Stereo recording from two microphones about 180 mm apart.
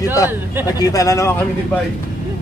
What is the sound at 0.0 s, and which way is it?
Speech, 20° left (ahead or behind).